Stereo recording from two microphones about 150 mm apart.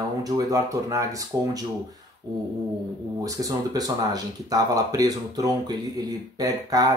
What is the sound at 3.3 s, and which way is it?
Speech, 25° right (ahead or behind).